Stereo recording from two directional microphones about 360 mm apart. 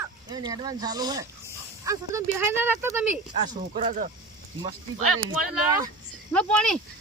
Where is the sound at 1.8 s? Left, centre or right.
Centre.